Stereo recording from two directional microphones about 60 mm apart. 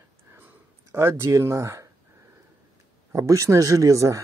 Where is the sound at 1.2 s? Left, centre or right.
Right.